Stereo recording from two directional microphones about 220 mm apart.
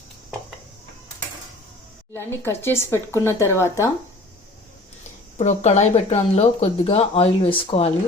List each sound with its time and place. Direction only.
2.1 s speech: 10° left (ahead or behind)
5.4 s speech: 30° left (ahead or behind)